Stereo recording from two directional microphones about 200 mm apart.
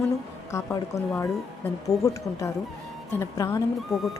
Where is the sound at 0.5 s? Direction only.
15° left (ahead or behind).